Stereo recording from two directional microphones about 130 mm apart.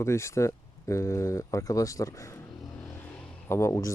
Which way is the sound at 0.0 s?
20° left (ahead or behind).